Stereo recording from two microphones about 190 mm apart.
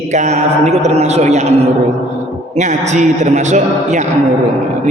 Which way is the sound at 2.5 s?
40° right (ahead or behind).